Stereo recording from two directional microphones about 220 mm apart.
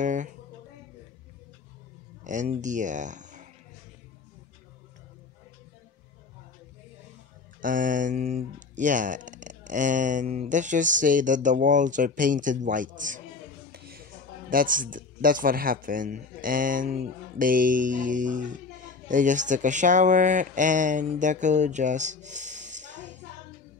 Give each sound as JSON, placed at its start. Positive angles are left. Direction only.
{"t": 0.0, "sound": "guitar", "side_deg": -35}
{"t": 2.2, "sound": "speech", "side_deg": -35}
{"t": 7.6, "sound": "speech", "side_deg": -35}
{"t": 13.7, "sound": "a sound", "side_deg": -45}
{"t": 14.5, "sound": "speech", "side_deg": -40}